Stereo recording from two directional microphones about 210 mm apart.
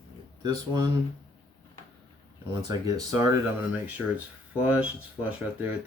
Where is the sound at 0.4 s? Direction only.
20° right (ahead or behind).